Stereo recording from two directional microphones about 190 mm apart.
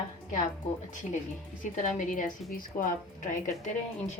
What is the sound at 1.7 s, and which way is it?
A woman's voice, 40° left (ahead or behind).